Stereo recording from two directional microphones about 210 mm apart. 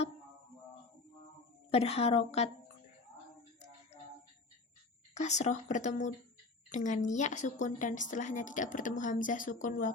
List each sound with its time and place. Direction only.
1.7 s a woman's voice: 30° left (ahead or behind)
5.1 s a woman's voice: 35° left (ahead or behind)